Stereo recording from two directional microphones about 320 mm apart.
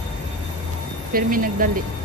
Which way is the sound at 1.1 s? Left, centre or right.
Right.